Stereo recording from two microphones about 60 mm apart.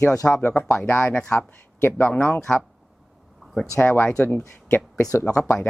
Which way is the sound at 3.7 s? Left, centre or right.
Left.